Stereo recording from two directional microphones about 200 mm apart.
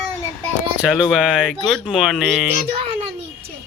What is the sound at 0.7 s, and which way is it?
Speech, 5° right (ahead or behind).